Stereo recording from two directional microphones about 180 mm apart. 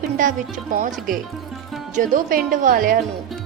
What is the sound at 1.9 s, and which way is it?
A woman's voice, 45° right (ahead or behind).